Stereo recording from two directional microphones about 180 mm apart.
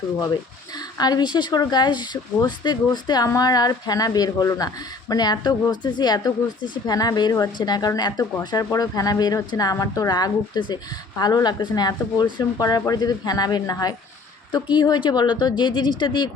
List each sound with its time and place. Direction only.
0.8 s speech: 20° left (ahead or behind)